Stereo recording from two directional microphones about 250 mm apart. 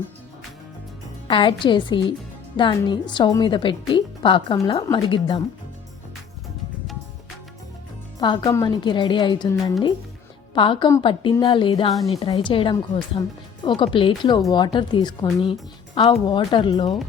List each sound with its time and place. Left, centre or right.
1.3 s a woman's voice: centre
8.2 s a woman's voice: centre